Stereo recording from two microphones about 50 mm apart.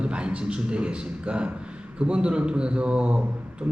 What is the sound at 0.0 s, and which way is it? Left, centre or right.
A man's voice, right.